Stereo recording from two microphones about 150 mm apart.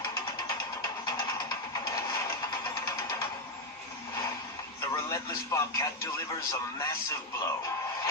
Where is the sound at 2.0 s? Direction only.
20° left (ahead or behind).